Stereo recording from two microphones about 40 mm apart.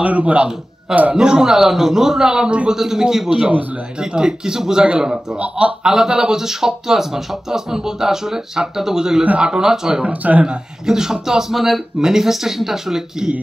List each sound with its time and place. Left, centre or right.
0.0 s a man's voice: right
1.1 s speech: centre
3.3 s speech: right
10.0 s a man's voice: right
10.9 s speech: centre